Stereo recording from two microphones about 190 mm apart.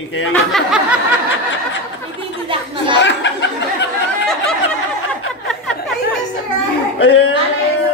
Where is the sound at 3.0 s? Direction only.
70° left (ahead or behind).